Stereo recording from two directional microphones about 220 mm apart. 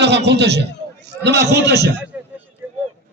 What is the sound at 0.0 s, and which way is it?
A man's voice, 50° right (ahead or behind).